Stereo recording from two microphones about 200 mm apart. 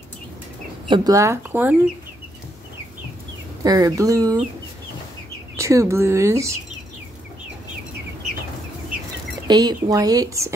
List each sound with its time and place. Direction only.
0.8 s speech: 20° right (ahead or behind)
3.6 s speech: 15° right (ahead or behind)
5.6 s speech: 15° right (ahead or behind)
9.5 s speech: 20° right (ahead or behind)